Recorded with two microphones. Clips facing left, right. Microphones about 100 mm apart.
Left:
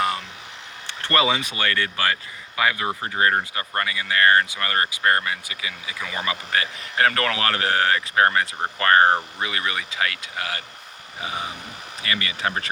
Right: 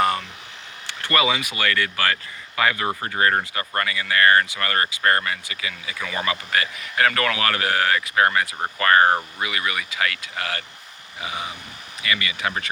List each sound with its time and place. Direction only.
0.9 s a sound: 30° left (ahead or behind)
1.5 s speech: 25° left (ahead or behind)
2.6 s speech: 10° left (ahead or behind)
6.5 s speech: 25° left (ahead or behind)
11.2 s speech: 35° left (ahead or behind)